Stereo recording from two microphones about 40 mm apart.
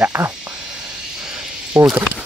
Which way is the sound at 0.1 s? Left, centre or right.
Right.